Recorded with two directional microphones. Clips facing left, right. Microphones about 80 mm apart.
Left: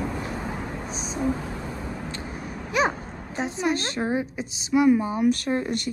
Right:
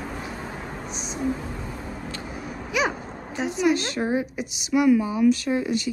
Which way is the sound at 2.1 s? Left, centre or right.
Left.